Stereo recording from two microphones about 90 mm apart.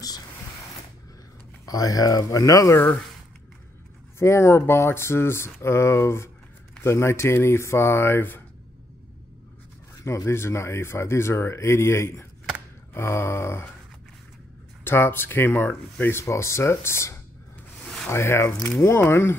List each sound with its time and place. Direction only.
1.7 s speech: 40° left (ahead or behind)
4.2 s speech: 30° left (ahead or behind)
10.0 s speech: 30° left (ahead or behind)
14.9 s speech: 25° left (ahead or behind)